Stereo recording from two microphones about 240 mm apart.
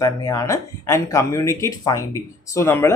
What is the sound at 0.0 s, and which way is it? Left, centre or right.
Speech, centre.